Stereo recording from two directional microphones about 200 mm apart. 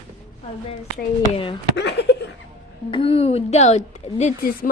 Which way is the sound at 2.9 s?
30° left (ahead or behind).